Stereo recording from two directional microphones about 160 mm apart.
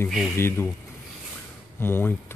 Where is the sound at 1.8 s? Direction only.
15° left (ahead or behind).